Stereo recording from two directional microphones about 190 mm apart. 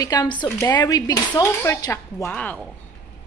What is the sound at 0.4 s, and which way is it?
Speech, 10° left (ahead or behind).